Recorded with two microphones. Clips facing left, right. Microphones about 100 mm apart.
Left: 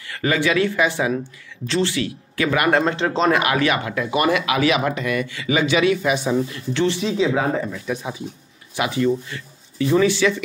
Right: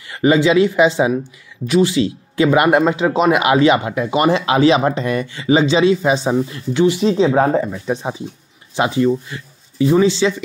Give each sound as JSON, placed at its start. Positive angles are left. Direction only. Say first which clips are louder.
{"t": 0.1, "sound": "speech", "louder": "right 7 dB", "side_deg": -20}
{"t": 2.8, "sound": "speech", "louder": "right 4 dB", "side_deg": -10}
{"t": 7.0, "sound": "speech", "louder": "right 6 dB", "side_deg": -35}